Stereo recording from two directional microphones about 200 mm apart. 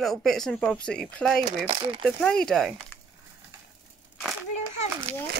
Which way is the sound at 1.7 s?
25° right (ahead or behind).